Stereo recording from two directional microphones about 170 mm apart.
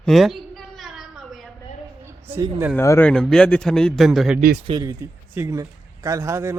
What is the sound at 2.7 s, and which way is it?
Speech, 15° left (ahead or behind).